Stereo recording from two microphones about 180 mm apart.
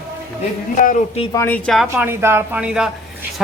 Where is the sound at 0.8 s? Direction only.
50° left (ahead or behind).